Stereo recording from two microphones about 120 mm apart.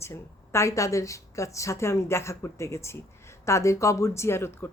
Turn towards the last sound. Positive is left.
turn(degrees=20)  # may be behind; listen again after turning